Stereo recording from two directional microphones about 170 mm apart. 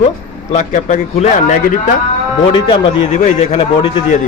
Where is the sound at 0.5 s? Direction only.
45° left (ahead or behind).